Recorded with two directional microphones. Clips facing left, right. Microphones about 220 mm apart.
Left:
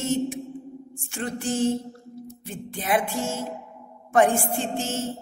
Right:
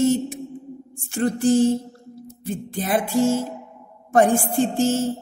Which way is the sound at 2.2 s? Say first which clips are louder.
Right 8 dB; 35° right (ahead or behind).